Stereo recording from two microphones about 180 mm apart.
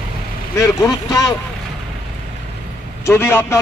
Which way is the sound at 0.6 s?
20° left (ahead or behind).